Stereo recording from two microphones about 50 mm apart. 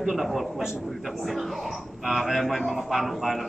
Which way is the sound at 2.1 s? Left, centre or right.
Centre.